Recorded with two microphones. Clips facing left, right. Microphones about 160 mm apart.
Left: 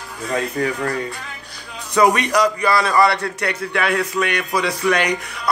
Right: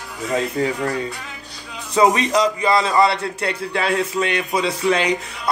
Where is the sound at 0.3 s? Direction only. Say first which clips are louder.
Right 1 dB; 20° right (ahead or behind).